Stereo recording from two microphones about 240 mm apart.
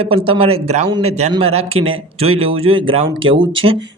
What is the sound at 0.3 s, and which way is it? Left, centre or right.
A man's voice, right.